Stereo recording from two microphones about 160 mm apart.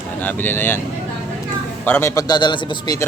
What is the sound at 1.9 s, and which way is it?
A man's voice, 15° left (ahead or behind).